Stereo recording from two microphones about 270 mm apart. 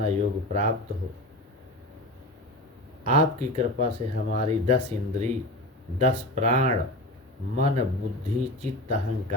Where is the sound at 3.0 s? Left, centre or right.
Right.